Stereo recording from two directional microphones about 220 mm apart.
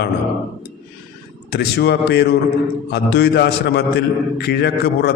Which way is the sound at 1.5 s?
45° left (ahead or behind).